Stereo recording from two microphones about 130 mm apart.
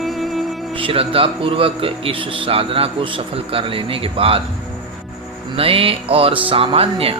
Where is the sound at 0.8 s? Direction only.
45° right (ahead or behind).